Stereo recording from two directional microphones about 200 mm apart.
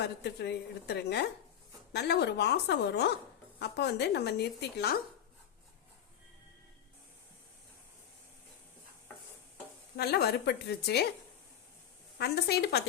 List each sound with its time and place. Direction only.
0.0 s speech: 55° left (ahead or behind)
10.0 s speech: 55° left (ahead or behind)
12.2 s speech: 55° left (ahead or behind)